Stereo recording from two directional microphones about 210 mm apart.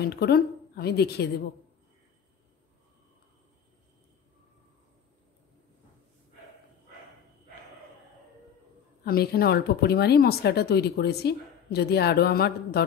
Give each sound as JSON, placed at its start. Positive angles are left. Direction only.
{"t": 0.0, "sound": "speech", "side_deg": 50}
{"t": 9.0, "sound": "speech", "side_deg": 45}